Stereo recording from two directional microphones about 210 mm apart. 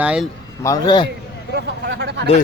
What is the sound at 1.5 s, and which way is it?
Speech, 50° right (ahead or behind).